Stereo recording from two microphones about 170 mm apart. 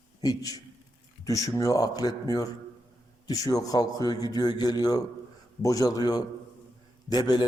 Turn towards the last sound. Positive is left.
turn(degrees=25)  # may be behind; listen again after turning